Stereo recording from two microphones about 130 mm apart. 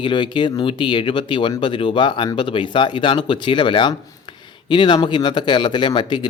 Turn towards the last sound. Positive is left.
turn(degrees=35)  # may be behind; listen again after turning